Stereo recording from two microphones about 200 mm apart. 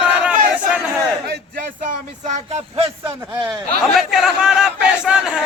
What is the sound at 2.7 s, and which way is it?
Speech, 25° right (ahead or behind).